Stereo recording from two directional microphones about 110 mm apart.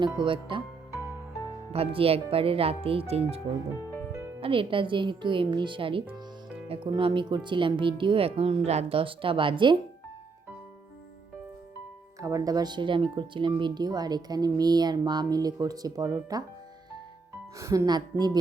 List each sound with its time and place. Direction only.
0.0 s speech: 45° right (ahead or behind)
1.7 s speech: 60° right (ahead or behind)
12.2 s speech: 30° right (ahead or behind)
17.6 s speech: 30° right (ahead or behind)